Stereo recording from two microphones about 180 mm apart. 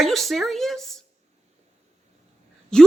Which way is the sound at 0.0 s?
Centre (ahead or behind).